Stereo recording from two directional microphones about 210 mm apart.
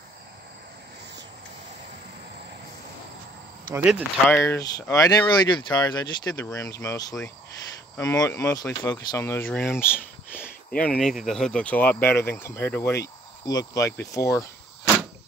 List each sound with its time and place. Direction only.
3.7 s speech: 5° right (ahead or behind)
4.4 s speech: 15° left (ahead or behind)